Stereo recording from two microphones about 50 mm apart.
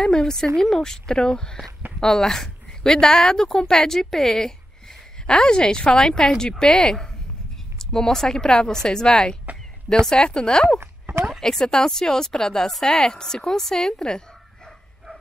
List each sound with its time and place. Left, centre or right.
0.0 s a woman's voice: centre
10.8 s a sound: right
11.4 s a woman's voice: centre